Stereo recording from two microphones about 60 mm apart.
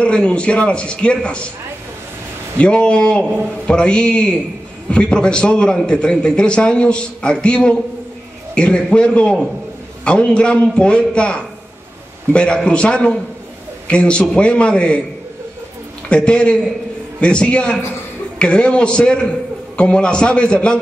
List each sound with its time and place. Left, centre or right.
0.0 s a man's voice: centre
2.6 s a man's voice: centre
16.1 s a man's voice: centre